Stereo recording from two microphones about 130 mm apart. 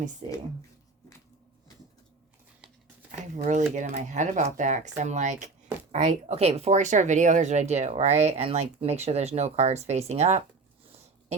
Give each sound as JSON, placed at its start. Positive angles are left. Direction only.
{"t": 3.1, "sound": "speech", "side_deg": -70}